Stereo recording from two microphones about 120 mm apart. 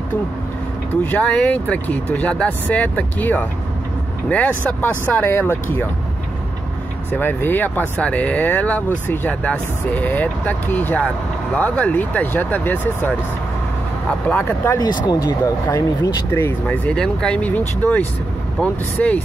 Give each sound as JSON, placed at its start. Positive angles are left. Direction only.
{"t": 1.2, "sound": "speech", "side_deg": 10}
{"t": 7.1, "sound": "speech", "side_deg": 15}
{"t": 14.3, "sound": "speech", "side_deg": 15}
{"t": 15.0, "sound": "speech", "side_deg": 30}
{"t": 16.3, "sound": "speech", "side_deg": 20}
{"t": 16.6, "sound": "speech", "side_deg": 10}